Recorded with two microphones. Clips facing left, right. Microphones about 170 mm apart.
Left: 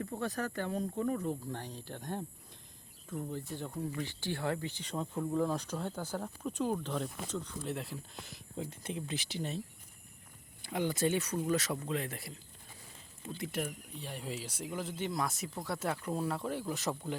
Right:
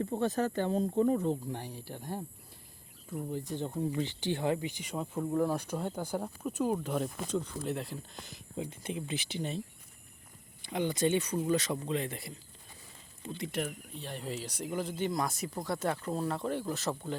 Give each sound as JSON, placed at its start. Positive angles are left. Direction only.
{"t": 0.0, "sound": "speech", "side_deg": -25}
{"t": 1.5, "sound": "speech", "side_deg": -10}
{"t": 7.6, "sound": "speech", "side_deg": 0}
{"t": 10.7, "sound": "speech", "side_deg": 5}